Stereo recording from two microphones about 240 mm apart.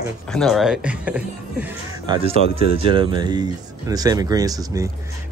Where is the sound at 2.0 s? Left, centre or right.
Right.